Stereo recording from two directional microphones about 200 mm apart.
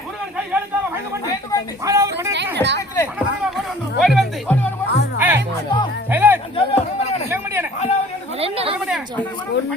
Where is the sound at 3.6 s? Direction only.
Centre (ahead or behind).